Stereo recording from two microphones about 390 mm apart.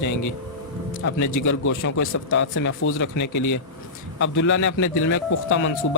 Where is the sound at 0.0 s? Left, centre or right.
Left.